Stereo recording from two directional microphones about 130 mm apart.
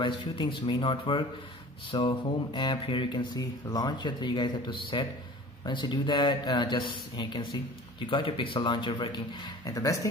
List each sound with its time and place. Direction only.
0.2 s speech: 40° left (ahead or behind)
9.7 s speech: 25° left (ahead or behind)